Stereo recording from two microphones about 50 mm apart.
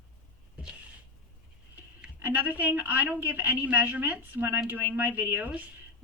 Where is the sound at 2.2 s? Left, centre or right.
Right.